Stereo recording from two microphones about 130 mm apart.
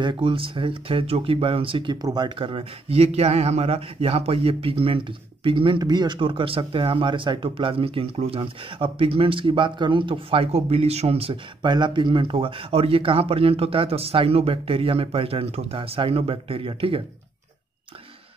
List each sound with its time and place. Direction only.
0.0 s speech: 40° right (ahead or behind)
2.3 s speech: 45° right (ahead or behind)